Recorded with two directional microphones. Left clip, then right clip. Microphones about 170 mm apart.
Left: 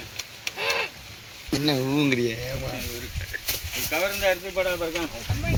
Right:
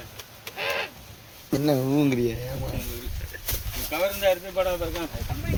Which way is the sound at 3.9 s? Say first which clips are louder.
Right 1 dB; 10° right (ahead or behind).